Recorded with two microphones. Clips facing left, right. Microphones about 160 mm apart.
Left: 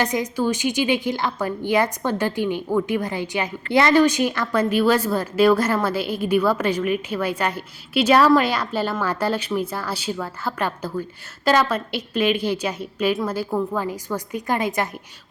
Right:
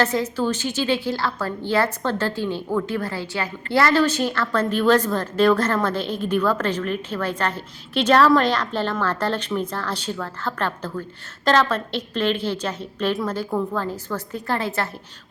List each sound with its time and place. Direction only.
0.0 s a woman's voice: 15° left (ahead or behind)